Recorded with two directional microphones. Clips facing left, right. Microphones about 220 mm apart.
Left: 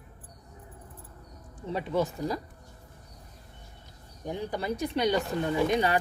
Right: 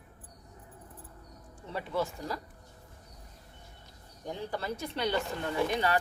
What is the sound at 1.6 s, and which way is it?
Speech, 15° left (ahead or behind).